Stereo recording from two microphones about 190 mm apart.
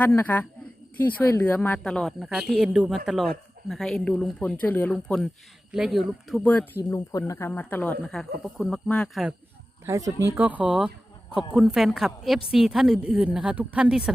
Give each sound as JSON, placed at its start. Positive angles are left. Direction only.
{"t": 0.0, "sound": "speech", "side_deg": 10}
{"t": 6.9, "sound": "speech", "side_deg": 20}
{"t": 9.8, "sound": "speech", "side_deg": -15}